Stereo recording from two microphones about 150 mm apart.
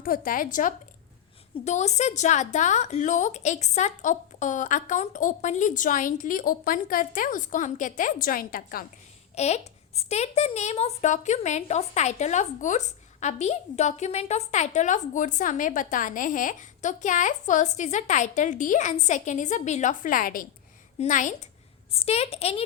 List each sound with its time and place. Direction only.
0.0 s a woman's voice: 70° left (ahead or behind)
1.6 s a woman's voice: 50° left (ahead or behind); by 8.9 s 75° left (ahead or behind)
9.3 s a child's voice: 45° left (ahead or behind); by 20.5 s 70° left (ahead or behind)
21.0 s a woman's voice: 55° left (ahead or behind)
21.9 s a child's voice: 45° left (ahead or behind)